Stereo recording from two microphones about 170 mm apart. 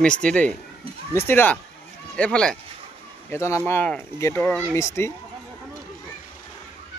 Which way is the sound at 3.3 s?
15° left (ahead or behind).